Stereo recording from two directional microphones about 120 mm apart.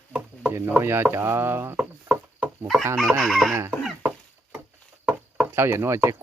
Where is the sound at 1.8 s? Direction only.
10° right (ahead or behind).